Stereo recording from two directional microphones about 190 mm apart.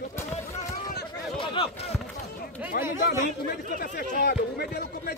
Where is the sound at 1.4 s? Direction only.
30° left (ahead or behind).